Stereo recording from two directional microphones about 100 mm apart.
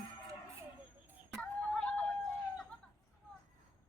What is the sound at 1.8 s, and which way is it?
Vehicle, 10° left (ahead or behind).